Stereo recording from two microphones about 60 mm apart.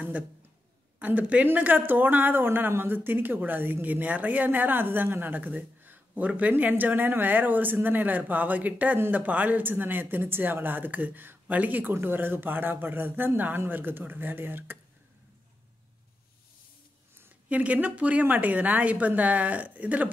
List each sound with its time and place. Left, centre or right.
0.9 s speech: right
11.9 s speech: right
17.5 s a woman's voice: right